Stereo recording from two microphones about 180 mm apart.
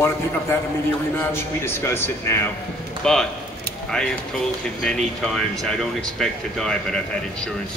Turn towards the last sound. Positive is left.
turn(degrees=5)  # may be behind; listen again after turning